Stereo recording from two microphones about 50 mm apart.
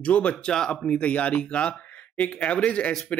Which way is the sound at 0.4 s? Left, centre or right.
Centre.